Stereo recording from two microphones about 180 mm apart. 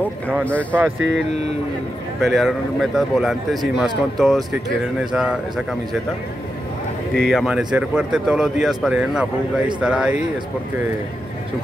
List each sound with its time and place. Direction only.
0.5 s speech: 10° left (ahead or behind)
0.9 s speech: 85° right
2.2 s speech: centre (ahead or behind)
7.2 s speech: centre (ahead or behind)